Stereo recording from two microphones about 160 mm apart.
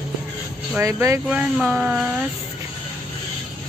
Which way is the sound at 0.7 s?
20° right (ahead or behind).